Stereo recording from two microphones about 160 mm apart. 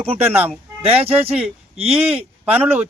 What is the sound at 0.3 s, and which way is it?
Speech, 10° right (ahead or behind).